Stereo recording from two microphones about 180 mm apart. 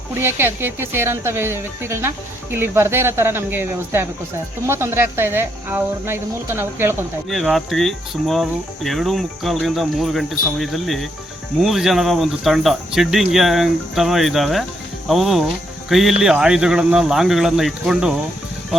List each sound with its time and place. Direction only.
0.2 s speech: 15° right (ahead or behind)
7.3 s speech: centre (ahead or behind)